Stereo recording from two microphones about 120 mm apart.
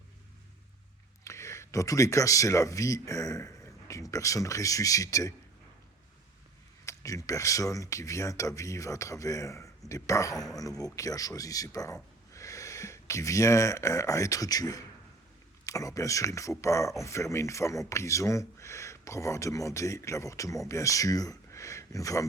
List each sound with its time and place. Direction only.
1.2 s speech: 25° left (ahead or behind)
6.8 s speech: 25° left (ahead or behind)
10.3 s speech: centre (ahead or behind)
10.6 s speech: 30° left (ahead or behind)